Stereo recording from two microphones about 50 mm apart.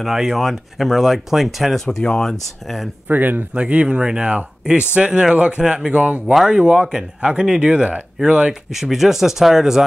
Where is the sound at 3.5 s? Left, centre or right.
Right.